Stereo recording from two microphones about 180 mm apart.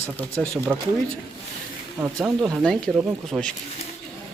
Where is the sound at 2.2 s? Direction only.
Centre (ahead or behind).